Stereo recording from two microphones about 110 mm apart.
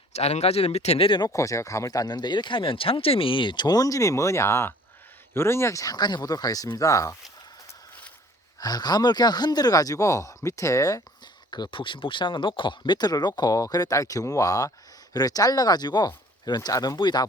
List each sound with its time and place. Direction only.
0.1 s speech: 75° left (ahead or behind); by 1.2 s 55° left (ahead or behind)
1.2 s speech: 30° left (ahead or behind)
8.6 s speech: 35° left (ahead or behind)
11.5 s speech: 45° left (ahead or behind)